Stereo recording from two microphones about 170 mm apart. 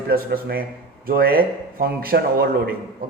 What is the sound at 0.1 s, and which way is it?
A man's voice, 65° right (ahead or behind).